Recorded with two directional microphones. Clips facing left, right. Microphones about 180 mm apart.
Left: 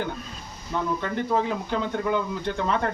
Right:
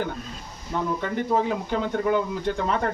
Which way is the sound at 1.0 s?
10° right (ahead or behind).